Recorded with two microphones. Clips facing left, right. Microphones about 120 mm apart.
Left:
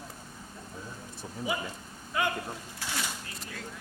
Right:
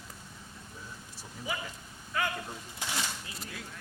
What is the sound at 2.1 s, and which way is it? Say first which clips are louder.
Speech: left 3 dB; 20° left (ahead or behind).